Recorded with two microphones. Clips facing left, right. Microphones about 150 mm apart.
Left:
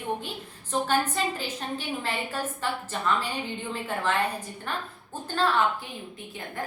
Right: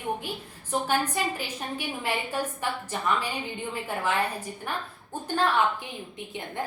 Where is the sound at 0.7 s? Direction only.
10° right (ahead or behind).